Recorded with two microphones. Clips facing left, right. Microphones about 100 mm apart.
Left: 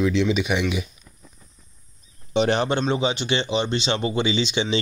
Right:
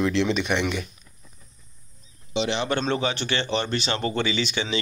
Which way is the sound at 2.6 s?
15° left (ahead or behind).